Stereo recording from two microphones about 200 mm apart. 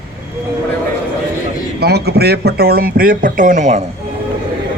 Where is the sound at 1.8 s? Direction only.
55° right (ahead or behind); by 3.8 s 35° right (ahead or behind).